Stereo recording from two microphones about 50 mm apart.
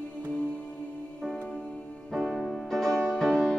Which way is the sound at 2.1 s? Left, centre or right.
Centre.